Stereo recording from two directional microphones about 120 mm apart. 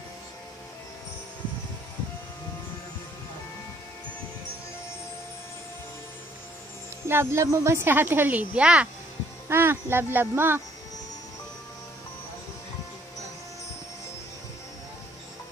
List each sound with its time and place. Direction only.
7.1 s a woman's voice: 20° right (ahead or behind)